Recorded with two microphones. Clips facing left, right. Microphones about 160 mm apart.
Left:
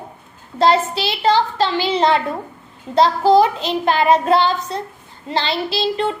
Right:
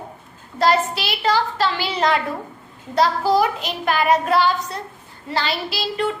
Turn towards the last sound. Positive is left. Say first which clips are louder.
# left 4 dB
turn(degrees=25)  # may be behind; listen again after turning